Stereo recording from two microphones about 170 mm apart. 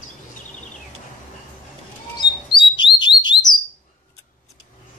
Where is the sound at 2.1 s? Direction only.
30° left (ahead or behind).